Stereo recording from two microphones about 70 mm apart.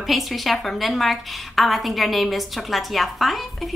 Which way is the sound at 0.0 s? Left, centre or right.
Centre.